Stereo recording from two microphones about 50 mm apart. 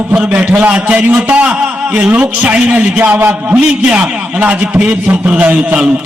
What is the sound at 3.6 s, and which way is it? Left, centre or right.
A man's voice, right.